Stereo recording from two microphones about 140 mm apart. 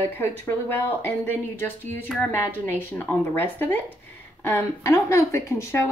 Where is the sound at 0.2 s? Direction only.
15° left (ahead or behind).